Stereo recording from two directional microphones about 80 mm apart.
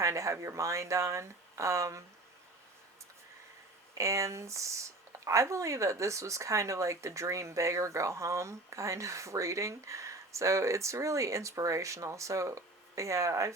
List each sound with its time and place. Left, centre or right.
0.0 s speech: right
3.9 s speech: right